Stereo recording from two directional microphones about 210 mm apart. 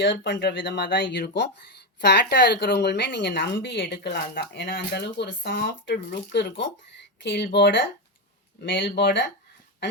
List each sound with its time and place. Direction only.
0.0 s a woman's voice: 55° left (ahead or behind)